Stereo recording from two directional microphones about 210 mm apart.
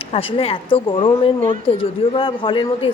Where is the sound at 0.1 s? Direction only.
25° left (ahead or behind).